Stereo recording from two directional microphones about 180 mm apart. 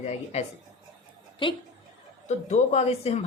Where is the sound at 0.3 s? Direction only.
35° left (ahead or behind).